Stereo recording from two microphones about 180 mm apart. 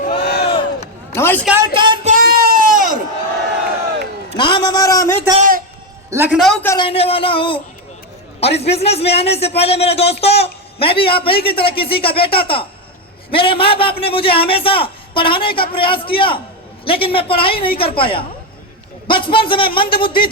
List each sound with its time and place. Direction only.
0.2 s crowd: 65° left (ahead or behind)
1.1 s a man's voice: 10° left (ahead or behind)
1.6 s music: 25° right (ahead or behind)
2.0 s a sound: 55° right (ahead or behind)
4.4 s a man's voice: 25° left (ahead or behind)
5.4 s a sound: 50° right (ahead or behind)
6.1 s a man's voice: 10° right (ahead or behind)
6.4 s speech: 5° left (ahead or behind)
6.7 s a man's voice: 30° left (ahead or behind)